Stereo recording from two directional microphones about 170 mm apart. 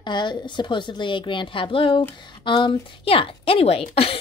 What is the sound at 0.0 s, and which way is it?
A woman's voice, 25° left (ahead or behind).